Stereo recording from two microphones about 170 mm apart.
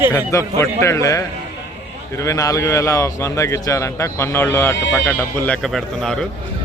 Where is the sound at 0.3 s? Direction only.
15° left (ahead or behind).